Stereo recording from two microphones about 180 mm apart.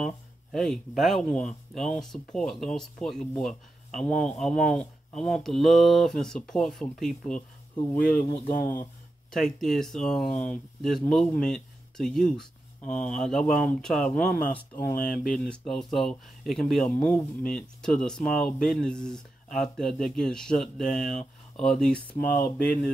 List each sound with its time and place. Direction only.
0.0 s speech: centre (ahead or behind)
7.9 s speech: 50° left (ahead or behind)
9.3 s speech: centre (ahead or behind)
22.1 s speech: 55° left (ahead or behind)